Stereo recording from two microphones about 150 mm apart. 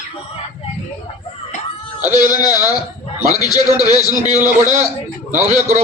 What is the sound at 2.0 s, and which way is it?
A man's voice, 25° left (ahead or behind).